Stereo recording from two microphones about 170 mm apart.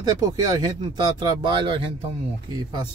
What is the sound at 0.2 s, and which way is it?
Speech, 25° right (ahead or behind).